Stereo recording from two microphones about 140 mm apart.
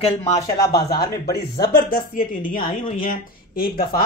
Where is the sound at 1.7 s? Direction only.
90° left.